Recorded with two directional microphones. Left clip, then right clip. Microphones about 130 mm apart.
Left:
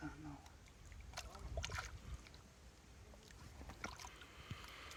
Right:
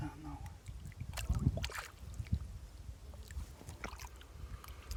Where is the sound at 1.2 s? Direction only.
90° right.